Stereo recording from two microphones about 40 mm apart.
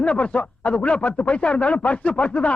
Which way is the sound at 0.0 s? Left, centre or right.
Left.